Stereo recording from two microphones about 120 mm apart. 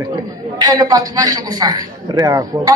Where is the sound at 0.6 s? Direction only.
35° right (ahead or behind).